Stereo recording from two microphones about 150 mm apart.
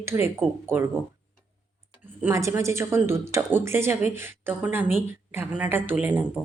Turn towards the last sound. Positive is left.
turn(degrees=-15)  # may be behind; listen again after turning